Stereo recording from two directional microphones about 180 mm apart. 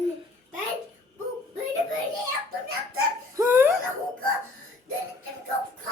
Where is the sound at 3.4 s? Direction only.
10° right (ahead or behind).